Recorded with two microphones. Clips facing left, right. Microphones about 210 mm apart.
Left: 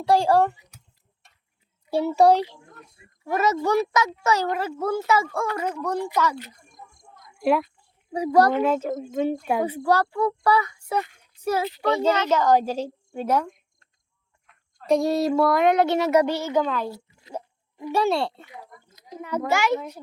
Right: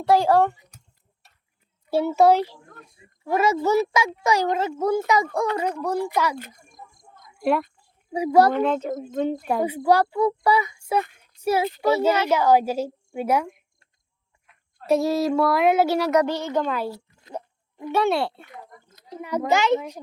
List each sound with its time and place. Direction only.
0.1 s speech: centre (ahead or behind)
1.9 s speech: 5° right (ahead or behind)
6.7 s a sound: centre (ahead or behind)
8.1 s speech: 10° right (ahead or behind)
8.5 s speech: 5° left (ahead or behind)
9.6 s a woman's voice: 10° right (ahead or behind)
16.1 s speech: 10° left (ahead or behind)
17.9 s speech: centre (ahead or behind); by 20.0 s 20° right (ahead or behind)